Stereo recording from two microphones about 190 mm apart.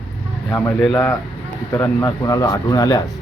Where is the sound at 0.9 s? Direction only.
10° left (ahead or behind).